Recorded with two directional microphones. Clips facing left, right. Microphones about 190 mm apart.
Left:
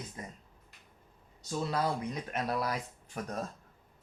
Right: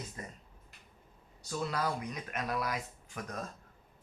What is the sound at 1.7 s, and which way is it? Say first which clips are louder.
Speech: left 4 dB; 30° left (ahead or behind).